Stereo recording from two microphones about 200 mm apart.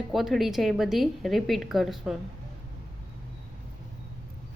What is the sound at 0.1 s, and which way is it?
A woman's voice, centre (ahead or behind).